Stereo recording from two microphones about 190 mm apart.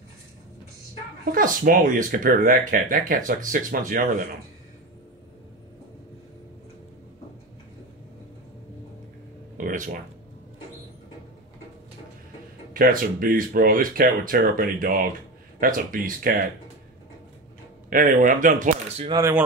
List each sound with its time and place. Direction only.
1.2 s speech: 45° right (ahead or behind)
9.6 s a sound: 45° right (ahead or behind)
12.7 s speech: 50° right (ahead or behind)
17.8 s speech: 45° right (ahead or behind)
19.0 s speech: 15° right (ahead or behind)